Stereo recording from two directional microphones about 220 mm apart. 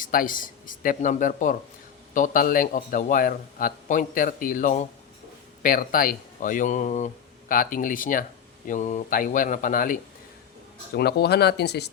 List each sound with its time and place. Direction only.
0.0 s a man's voice: 40° left (ahead or behind)